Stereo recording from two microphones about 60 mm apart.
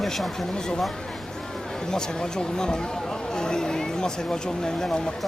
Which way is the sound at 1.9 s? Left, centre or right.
Centre.